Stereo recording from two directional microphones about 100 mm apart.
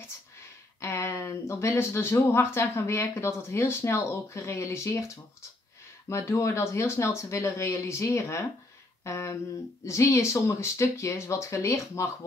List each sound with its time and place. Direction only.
0.7 s speech: 25° left (ahead or behind)